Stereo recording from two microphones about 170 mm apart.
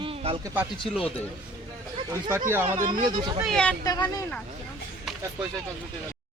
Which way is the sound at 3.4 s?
5° left (ahead or behind).